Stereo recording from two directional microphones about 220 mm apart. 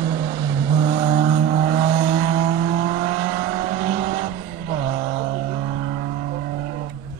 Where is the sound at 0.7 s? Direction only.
35° right (ahead or behind).